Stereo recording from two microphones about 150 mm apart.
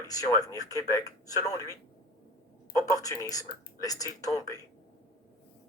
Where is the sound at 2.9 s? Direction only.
25° left (ahead or behind).